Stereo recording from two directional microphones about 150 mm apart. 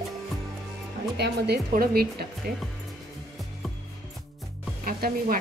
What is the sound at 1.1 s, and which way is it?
Speech, 90° right.